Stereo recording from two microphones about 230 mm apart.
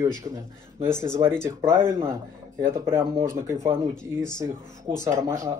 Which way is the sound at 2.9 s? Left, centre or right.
Centre.